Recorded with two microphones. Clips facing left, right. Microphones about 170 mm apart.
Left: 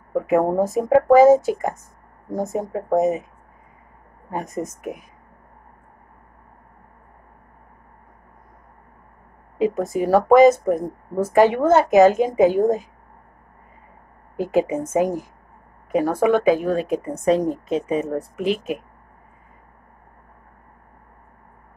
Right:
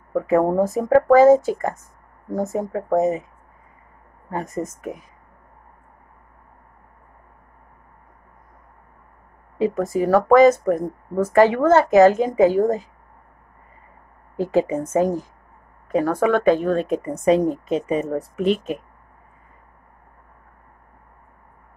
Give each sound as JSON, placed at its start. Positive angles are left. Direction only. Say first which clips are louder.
{"t": 0.5, "sound": "a woman's voice", "louder": "even", "side_deg": 15}
{"t": 4.3, "sound": "a woman's voice", "louder": "right 1 dB", "side_deg": 15}
{"t": 9.6, "sound": "a woman's voice", "louder": "even", "side_deg": 15}
{"t": 14.3, "sound": "a woman's voice", "louder": "even", "side_deg": 15}